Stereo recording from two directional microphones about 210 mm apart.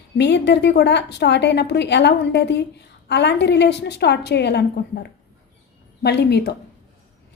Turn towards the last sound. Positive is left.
turn(degrees=50)  # may be behind; listen again after turning